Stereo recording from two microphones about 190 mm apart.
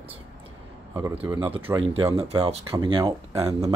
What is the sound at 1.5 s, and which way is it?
Speech, 30° right (ahead or behind).